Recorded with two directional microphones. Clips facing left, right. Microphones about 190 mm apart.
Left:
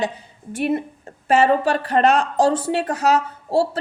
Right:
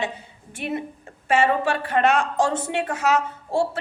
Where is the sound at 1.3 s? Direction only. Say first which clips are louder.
Left 4 dB; 40° left (ahead or behind).